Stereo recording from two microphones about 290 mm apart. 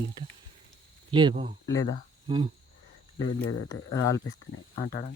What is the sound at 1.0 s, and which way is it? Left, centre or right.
Speech, centre.